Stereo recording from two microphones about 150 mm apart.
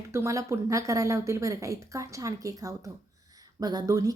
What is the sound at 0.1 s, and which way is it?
A woman's voice, 20° right (ahead or behind).